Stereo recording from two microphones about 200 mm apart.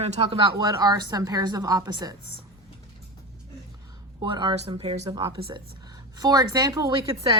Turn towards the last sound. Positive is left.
turn(degrees=-15)  # may be behind; listen again after turning